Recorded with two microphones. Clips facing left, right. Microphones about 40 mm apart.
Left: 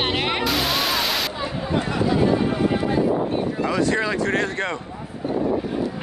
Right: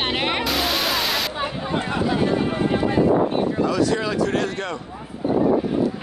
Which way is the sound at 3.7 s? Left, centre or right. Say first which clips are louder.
Even; left.